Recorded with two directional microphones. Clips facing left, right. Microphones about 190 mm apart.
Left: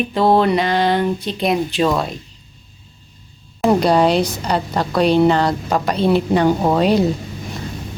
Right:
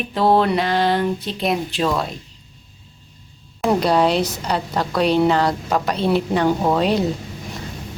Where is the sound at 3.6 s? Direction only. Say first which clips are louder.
Left 3 dB; centre (ahead or behind).